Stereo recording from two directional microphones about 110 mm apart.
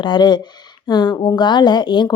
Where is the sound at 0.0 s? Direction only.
40° left (ahead or behind).